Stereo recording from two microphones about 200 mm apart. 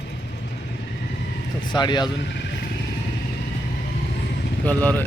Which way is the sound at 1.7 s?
20° left (ahead or behind).